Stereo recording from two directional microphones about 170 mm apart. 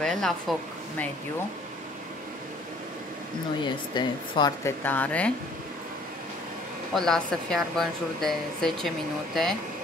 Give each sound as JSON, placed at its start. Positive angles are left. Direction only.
{"t": 0.0, "sound": "speech", "side_deg": 0}
{"t": 3.6, "sound": "speech", "side_deg": 25}
{"t": 4.8, "sound": "speech", "side_deg": 10}
{"t": 6.9, "sound": "speech", "side_deg": 0}